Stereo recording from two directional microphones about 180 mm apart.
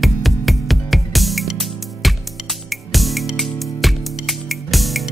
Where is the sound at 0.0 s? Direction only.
Centre (ahead or behind).